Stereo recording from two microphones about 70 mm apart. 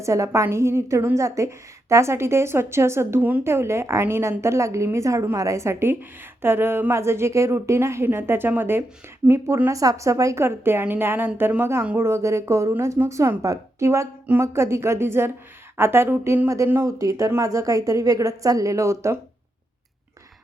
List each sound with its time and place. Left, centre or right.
0.0 s a woman's voice: right
9.6 s a woman's voice: right
10.4 s a woman's voice: right
16.8 s a woman's voice: right